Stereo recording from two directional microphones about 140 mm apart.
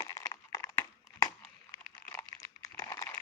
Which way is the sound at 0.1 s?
25° left (ahead or behind).